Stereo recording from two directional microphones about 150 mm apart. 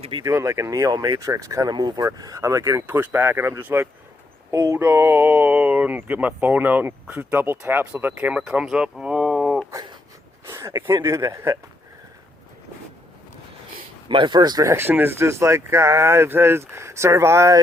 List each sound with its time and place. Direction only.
0.0 s speech: 35° right (ahead or behind)
0.3 s speech: 20° right (ahead or behind)
9.7 s a sound: 30° right (ahead or behind)
10.4 s a sound: 20° right (ahead or behind)
11.0 s speech: 20° right (ahead or behind)
14.1 s speech: 30° right (ahead or behind)